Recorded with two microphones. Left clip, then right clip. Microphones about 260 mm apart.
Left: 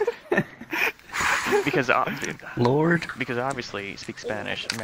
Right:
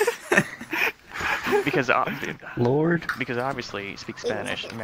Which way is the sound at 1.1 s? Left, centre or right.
Left.